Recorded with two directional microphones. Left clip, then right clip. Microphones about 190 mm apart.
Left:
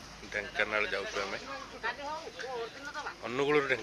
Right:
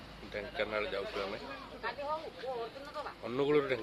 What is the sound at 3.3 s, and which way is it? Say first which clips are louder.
Speech: left 2 dB; centre (ahead or behind).